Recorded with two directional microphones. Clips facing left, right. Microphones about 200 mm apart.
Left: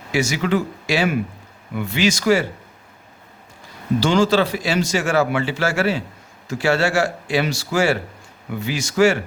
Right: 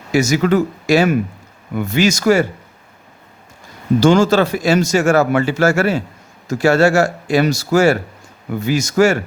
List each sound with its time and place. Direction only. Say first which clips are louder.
0.1 s speech: right 5 dB; 45° right (ahead or behind)
4.0 s speech: right 5 dB; 45° right (ahead or behind)